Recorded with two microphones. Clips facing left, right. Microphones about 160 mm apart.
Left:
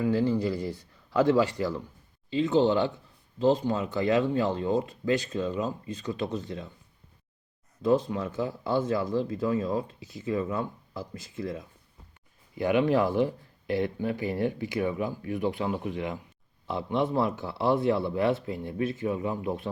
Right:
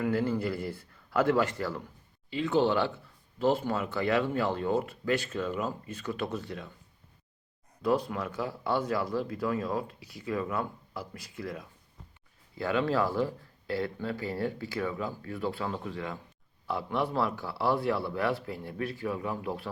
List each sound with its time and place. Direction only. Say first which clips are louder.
0.2 s a man's voice: left 4 dB; 15° left (ahead or behind)
7.8 s speech: left 4 dB; 25° left (ahead or behind)